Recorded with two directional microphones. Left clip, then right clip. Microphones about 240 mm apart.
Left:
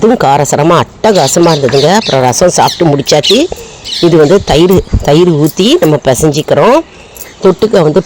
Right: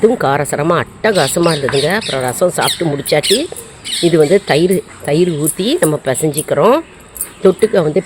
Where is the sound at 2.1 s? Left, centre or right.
Left.